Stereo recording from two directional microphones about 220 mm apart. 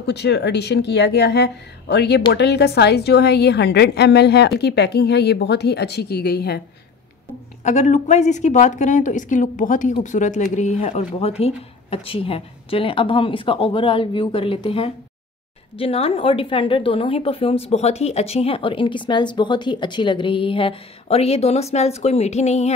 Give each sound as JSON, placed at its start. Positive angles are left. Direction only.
{"t": 0.0, "sound": "speech", "side_deg": 50}
{"t": 7.6, "sound": "a woman's voice", "side_deg": 35}